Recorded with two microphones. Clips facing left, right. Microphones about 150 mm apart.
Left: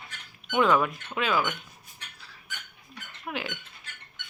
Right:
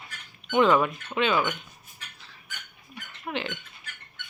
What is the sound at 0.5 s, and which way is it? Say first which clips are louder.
Speech: right 2 dB; centre (ahead or behind).